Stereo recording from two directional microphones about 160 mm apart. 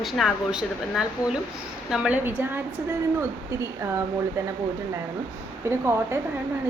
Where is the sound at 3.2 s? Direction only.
20° right (ahead or behind).